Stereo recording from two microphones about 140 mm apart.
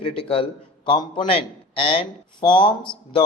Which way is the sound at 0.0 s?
40° left (ahead or behind).